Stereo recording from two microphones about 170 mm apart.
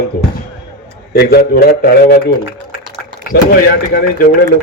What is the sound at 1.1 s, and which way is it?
A man's voice, 70° left (ahead or behind).